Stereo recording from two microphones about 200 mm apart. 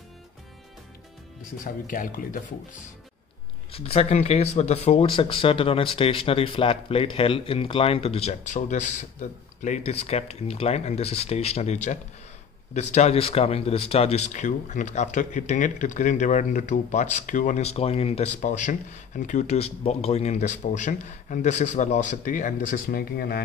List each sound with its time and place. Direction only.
1.6 s speech: 45° left (ahead or behind)
3.7 s speech: 30° left (ahead or behind); by 23.4 s 50° left (ahead or behind)